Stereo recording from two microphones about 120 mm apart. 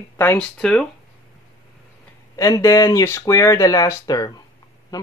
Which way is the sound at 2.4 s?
30° left (ahead or behind).